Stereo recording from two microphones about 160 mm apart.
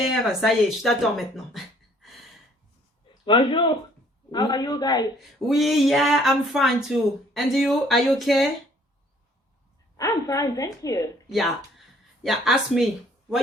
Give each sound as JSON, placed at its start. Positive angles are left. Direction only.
{"t": 0.0, "sound": "speech", "side_deg": 0}
{"t": 3.2, "sound": "a woman's voice", "side_deg": 30}
{"t": 5.5, "sound": "speech", "side_deg": 0}
{"t": 10.0, "sound": "a woman's voice", "side_deg": 20}
{"t": 12.2, "sound": "speech", "side_deg": 0}